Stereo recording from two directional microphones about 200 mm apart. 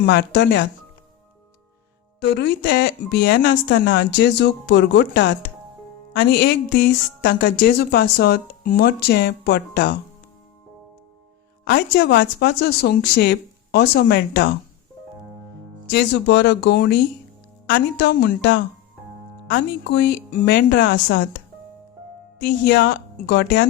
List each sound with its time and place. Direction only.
0.0 s speech: 55° left (ahead or behind)
2.2 s speech: 55° left (ahead or behind)
11.6 s speech: 50° left (ahead or behind)
15.9 s speech: 55° left (ahead or behind)
22.4 s speech: 55° left (ahead or behind)